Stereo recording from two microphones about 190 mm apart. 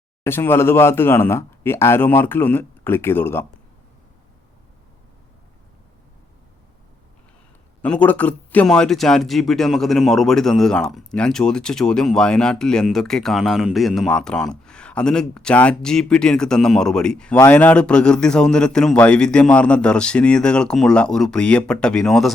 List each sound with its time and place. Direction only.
0.3 s speech: 10° left (ahead or behind)
7.8 s speech: 5° left (ahead or behind)